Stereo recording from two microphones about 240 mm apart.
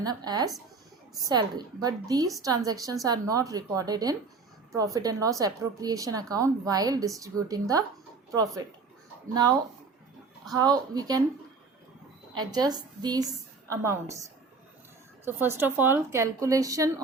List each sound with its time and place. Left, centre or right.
0.0 s a woman's voice: centre
9.3 s a woman's voice: centre
12.3 s a woman's voice: centre